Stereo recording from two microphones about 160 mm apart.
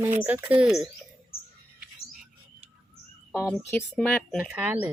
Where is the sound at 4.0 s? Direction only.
5° left (ahead or behind).